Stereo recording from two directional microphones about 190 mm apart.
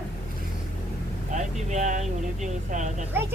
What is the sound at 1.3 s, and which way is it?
Vehicle, 40° right (ahead or behind).